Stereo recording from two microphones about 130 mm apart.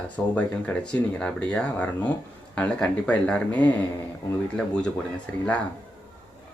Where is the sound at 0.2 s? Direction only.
10° left (ahead or behind).